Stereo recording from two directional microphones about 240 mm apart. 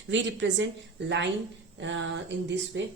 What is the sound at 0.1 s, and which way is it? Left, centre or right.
A woman's voice, right.